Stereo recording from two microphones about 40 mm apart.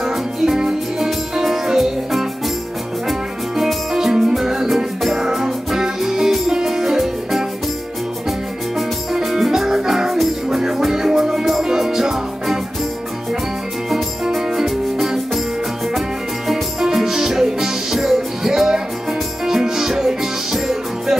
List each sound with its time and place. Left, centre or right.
0.0 s music: centre
14.3 s music: centre
16.4 s music: centre